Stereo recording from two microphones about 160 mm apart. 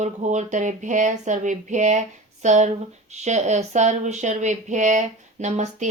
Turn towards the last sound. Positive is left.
turn(degrees=-50)  # may be behind; listen again after turning